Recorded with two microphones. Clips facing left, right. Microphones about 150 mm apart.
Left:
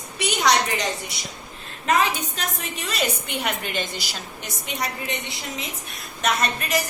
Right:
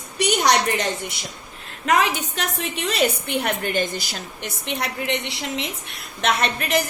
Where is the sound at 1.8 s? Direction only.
75° right (ahead or behind).